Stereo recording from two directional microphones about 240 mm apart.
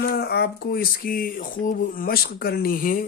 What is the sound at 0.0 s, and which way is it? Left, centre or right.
Speech, left.